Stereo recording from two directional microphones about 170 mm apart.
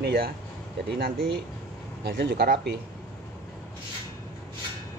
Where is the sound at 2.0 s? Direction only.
70° right (ahead or behind).